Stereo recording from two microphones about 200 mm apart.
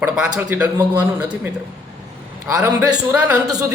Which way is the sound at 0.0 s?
10° right (ahead or behind).